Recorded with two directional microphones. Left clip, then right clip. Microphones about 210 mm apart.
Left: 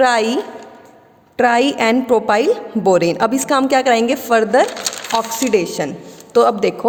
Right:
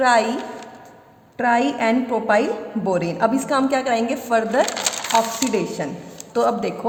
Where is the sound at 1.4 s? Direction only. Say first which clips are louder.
Left 5 dB; 50° left (ahead or behind).